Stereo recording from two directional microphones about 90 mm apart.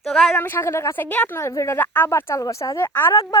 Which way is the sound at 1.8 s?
20° left (ahead or behind).